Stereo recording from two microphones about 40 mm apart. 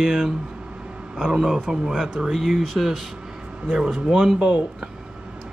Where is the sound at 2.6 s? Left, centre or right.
Centre.